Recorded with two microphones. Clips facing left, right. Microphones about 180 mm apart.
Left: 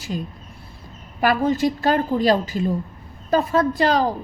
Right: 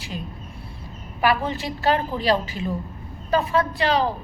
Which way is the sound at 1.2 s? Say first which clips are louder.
Left 4 dB; 45° left (ahead or behind).